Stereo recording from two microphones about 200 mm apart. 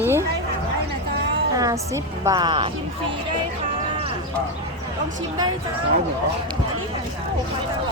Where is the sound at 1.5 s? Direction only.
15° right (ahead or behind).